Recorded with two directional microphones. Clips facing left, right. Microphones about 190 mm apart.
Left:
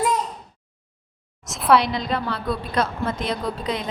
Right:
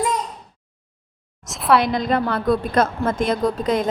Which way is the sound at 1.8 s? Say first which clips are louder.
Right 5 dB; 50° right (ahead or behind).